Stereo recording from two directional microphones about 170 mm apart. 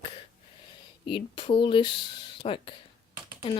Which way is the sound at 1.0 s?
30° left (ahead or behind).